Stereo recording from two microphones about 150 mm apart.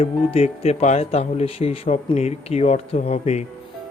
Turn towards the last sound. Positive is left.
turn(degrees=45)  # may be behind; listen again after turning